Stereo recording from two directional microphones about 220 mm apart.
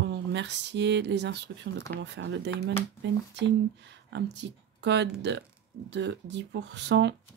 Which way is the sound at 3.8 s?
50° right (ahead or behind).